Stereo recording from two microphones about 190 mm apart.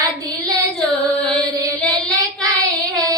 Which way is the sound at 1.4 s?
20° right (ahead or behind).